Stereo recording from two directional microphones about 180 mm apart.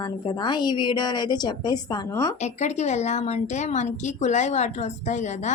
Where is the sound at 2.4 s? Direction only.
40° left (ahead or behind).